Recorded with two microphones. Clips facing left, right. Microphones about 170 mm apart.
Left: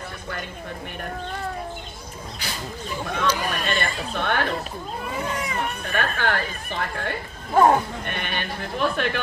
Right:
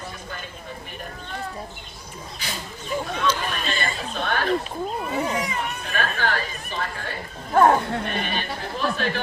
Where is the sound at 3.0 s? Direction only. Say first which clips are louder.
Left 5 dB; 55° left (ahead or behind).